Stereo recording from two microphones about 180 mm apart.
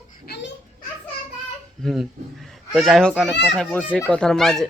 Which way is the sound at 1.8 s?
Centre (ahead or behind).